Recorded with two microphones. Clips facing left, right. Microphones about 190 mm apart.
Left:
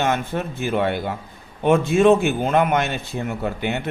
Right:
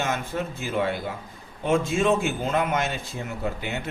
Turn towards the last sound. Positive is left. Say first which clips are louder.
# left 5 dB
turn(degrees=65)  # may be behind; listen again after turning